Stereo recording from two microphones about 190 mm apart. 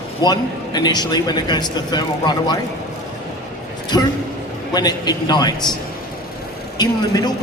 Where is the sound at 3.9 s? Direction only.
20° left (ahead or behind).